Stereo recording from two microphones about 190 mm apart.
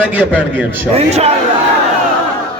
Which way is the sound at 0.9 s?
35° right (ahead or behind).